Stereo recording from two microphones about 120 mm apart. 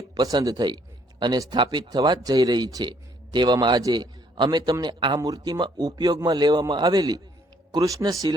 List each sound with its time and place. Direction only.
0.1 s speech: 35° right (ahead or behind)